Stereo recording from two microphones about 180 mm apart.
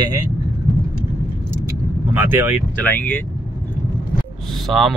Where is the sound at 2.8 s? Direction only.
10° left (ahead or behind).